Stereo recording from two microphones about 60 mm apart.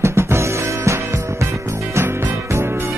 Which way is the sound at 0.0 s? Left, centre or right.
Right.